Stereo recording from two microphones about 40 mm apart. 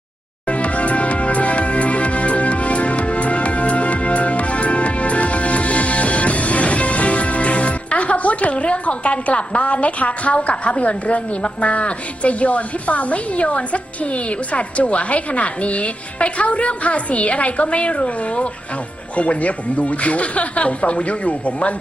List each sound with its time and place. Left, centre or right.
0.4 s music: left
19.1 s speech: left